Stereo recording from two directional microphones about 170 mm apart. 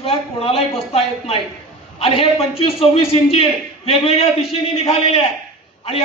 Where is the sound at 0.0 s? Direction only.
35° left (ahead or behind).